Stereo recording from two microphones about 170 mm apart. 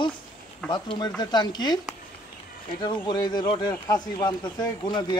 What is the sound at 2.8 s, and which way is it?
A man's voice, 25° left (ahead or behind).